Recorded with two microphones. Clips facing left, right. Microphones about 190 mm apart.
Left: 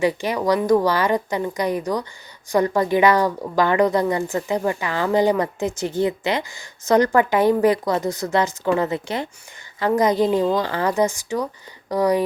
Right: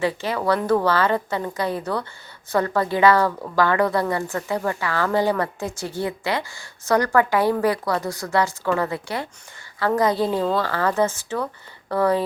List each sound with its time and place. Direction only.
0.0 s a woman's voice: 15° left (ahead or behind)